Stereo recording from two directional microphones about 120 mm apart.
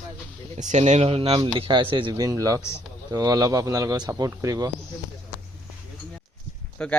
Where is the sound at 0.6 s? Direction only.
80° right; by 4.7 s 30° right (ahead or behind).